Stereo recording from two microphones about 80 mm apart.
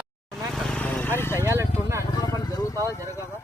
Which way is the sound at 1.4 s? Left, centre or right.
Right.